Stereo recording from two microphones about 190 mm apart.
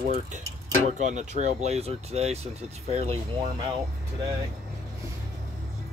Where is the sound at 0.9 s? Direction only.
40° right (ahead or behind).